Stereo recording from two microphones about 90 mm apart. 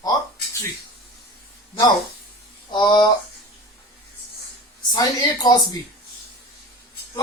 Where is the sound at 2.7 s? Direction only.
55° left (ahead or behind).